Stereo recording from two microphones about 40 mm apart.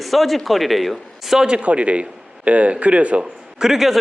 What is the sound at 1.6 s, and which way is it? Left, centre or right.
A man's voice, right.